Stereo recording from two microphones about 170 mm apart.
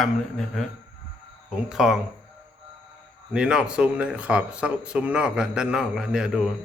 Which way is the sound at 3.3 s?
5° right (ahead or behind).